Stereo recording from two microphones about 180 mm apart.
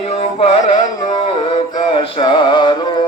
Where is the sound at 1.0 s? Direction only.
25° left (ahead or behind).